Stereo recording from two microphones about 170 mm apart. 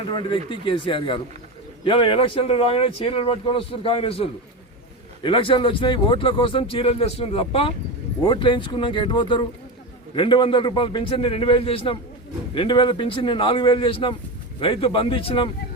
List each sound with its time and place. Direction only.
0.0 s speech: 30° left (ahead or behind)